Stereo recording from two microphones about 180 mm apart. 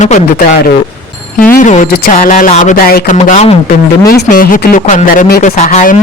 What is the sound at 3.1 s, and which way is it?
Speech, 40° left (ahead or behind).